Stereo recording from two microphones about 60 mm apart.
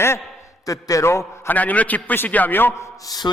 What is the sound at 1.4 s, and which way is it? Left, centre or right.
A man's voice, left.